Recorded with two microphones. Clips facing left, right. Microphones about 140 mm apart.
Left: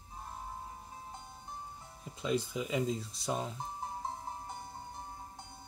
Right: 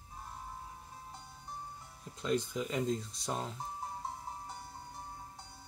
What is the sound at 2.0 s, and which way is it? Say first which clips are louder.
Speech: even; 5° left (ahead or behind).